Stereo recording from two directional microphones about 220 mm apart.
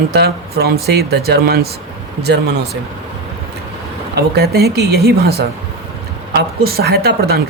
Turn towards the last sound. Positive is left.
turn(degrees=-45)  # may be behind; listen again after turning